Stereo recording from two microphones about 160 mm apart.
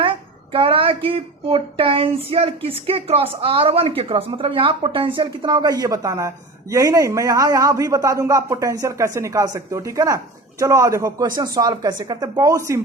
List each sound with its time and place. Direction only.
0.0 s a woman's voice: 35° right (ahead or behind); by 12.8 s 20° right (ahead or behind)